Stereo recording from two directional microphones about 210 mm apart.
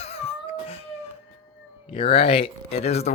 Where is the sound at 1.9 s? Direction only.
25° left (ahead or behind).